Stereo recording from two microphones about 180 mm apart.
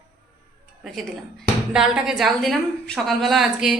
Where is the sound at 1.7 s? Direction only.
5° right (ahead or behind).